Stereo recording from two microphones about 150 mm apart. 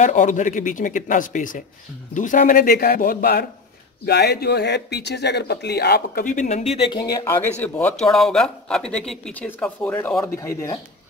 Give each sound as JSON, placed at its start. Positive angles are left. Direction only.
{"t": 0.0, "sound": "speech", "side_deg": 55}
{"t": 6.9, "sound": "speech", "side_deg": 25}